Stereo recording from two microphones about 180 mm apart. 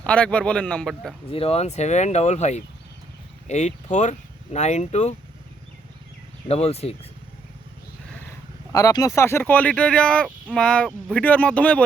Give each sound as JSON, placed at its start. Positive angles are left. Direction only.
{"t": 0.0, "sound": "speech", "side_deg": 5}
{"t": 1.3, "sound": "speech", "side_deg": 35}
{"t": 6.5, "sound": "speech", "side_deg": 35}
{"t": 8.7, "sound": "speech", "side_deg": 20}